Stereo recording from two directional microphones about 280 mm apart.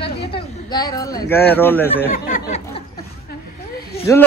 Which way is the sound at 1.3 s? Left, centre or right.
Centre.